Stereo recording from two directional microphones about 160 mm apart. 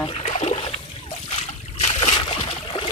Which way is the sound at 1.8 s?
35° left (ahead or behind).